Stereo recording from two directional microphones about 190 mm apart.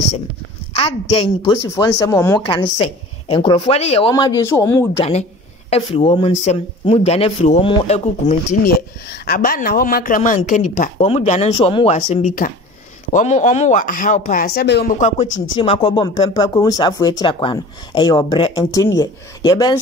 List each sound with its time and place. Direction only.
0.7 s speech: 30° left (ahead or behind)
1.8 s speech: 20° left (ahead or behind)
2.4 s speech: 25° left (ahead or behind)
4.1 s speech: 15° left (ahead or behind)
5.8 s speech: 25° left (ahead or behind)
8.6 s speech: 55° left (ahead or behind)
15.0 s speech: 40° left (ahead or behind)
15.5 s speech: 30° left (ahead or behind)